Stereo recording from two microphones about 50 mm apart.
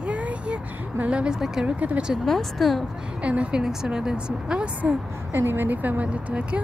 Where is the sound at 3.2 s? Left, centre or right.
Right.